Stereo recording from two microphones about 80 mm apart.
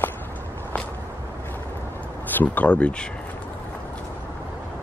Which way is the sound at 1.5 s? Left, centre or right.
Left.